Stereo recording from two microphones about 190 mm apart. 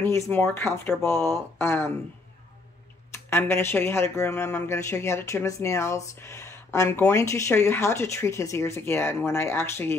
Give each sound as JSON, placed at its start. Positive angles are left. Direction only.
{"t": 0.0, "sound": "speech", "side_deg": 10}
{"t": 3.1, "sound": "speech", "side_deg": 15}